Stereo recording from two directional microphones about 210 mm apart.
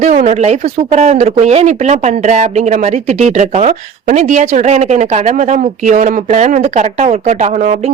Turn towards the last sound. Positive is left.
turn(degrees=-35)  # may be behind; listen again after turning